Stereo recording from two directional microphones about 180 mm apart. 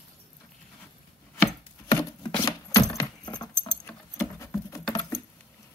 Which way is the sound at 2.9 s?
20° left (ahead or behind).